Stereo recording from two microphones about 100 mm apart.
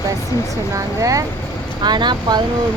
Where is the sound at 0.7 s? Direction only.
35° right (ahead or behind).